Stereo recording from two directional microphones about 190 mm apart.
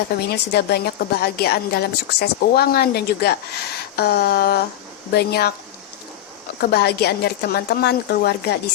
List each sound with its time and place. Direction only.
0.3 s a woman's voice: 55° left (ahead or behind)
6.6 s a woman's voice: 55° left (ahead or behind)